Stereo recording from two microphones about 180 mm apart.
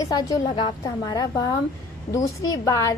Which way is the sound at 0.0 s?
20° left (ahead or behind).